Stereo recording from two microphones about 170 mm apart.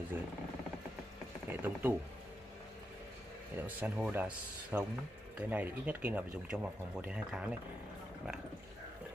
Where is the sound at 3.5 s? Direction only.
10° right (ahead or behind).